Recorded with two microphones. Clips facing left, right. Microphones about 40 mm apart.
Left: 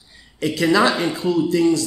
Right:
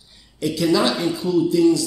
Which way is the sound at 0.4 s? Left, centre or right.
Left.